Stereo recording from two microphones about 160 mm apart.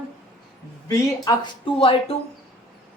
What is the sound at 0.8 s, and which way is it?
Speech, 20° left (ahead or behind).